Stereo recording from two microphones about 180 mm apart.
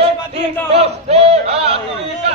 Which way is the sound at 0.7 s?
35° right (ahead or behind).